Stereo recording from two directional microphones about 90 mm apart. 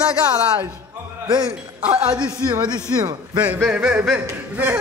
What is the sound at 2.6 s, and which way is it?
Speech, 50° right (ahead or behind).